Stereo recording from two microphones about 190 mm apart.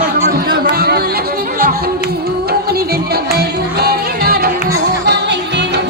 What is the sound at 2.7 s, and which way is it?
Music, 55° right (ahead or behind).